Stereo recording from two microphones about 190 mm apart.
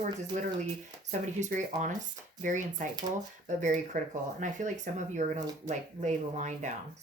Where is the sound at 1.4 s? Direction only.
40° right (ahead or behind).